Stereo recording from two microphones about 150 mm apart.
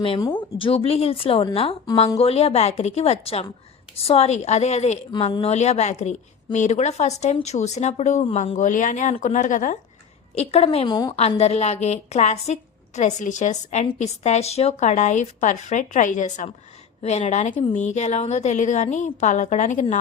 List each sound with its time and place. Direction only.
0.3 s a woman's voice: 35° left (ahead or behind); by 9.7 s 60° left (ahead or behind)
10.3 s a woman's voice: 45° left (ahead or behind)
10.8 s a woman's voice: 25° left (ahead or behind)
11.2 s a woman's voice: 45° left (ahead or behind)